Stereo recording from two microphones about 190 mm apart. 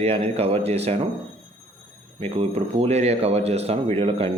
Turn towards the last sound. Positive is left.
turn(degrees=-30)  # may be behind; listen again after turning